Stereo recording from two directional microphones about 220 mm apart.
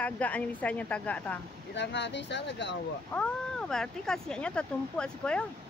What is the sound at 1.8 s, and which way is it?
Speech, 55° left (ahead or behind).